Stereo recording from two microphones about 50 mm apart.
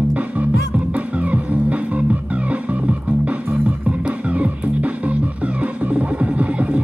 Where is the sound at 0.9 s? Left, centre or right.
Right.